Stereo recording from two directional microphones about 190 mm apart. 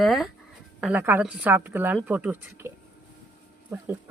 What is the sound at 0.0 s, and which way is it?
Speech, centre (ahead or behind).